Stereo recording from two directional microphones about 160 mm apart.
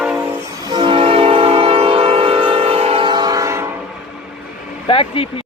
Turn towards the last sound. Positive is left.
turn(degrees=35)  # may be behind; listen again after turning